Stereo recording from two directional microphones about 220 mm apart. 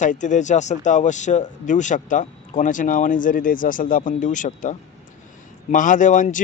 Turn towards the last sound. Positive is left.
turn(degrees=35)  # may be behind; listen again after turning